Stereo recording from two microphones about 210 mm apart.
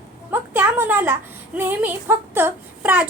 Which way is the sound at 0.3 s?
10° right (ahead or behind).